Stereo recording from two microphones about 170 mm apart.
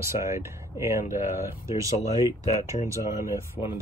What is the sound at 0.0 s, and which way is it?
Speech, 15° right (ahead or behind).